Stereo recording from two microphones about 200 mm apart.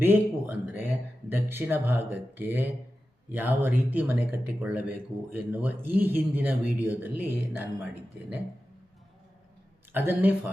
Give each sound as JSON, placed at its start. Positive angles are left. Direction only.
{"t": 0.0, "sound": "speech", "side_deg": -10}
{"t": 9.9, "sound": "speech", "side_deg": -10}